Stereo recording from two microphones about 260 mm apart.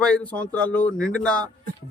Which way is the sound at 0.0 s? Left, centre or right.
Centre.